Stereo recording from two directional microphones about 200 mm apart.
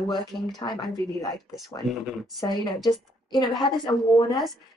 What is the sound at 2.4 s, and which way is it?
A woman's voice, 20° left (ahead or behind).